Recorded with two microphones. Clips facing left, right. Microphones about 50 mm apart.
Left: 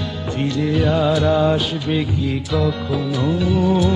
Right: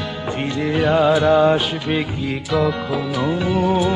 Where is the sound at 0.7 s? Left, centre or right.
Right.